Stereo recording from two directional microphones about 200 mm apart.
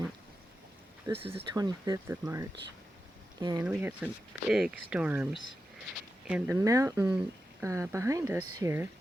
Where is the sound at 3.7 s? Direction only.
10° right (ahead or behind).